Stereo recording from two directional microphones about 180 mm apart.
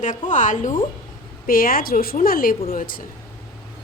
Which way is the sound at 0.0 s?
45° left (ahead or behind).